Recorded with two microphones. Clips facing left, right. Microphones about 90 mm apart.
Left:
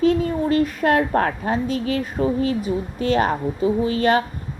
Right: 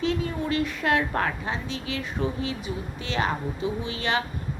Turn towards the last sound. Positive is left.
turn(degrees=45)  # may be behind; listen again after turning